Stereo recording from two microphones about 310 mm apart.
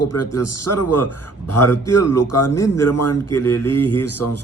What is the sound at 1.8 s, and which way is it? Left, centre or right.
A man's voice, left.